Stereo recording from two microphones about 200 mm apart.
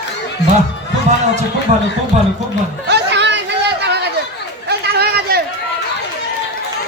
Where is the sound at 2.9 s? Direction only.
60° right (ahead or behind).